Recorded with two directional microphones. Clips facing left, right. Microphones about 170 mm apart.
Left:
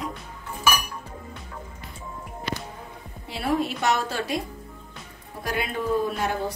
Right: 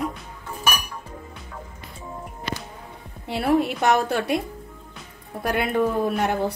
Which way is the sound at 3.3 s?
60° right (ahead or behind).